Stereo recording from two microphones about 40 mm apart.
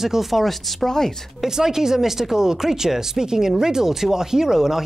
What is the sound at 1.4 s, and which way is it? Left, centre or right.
Speech, centre.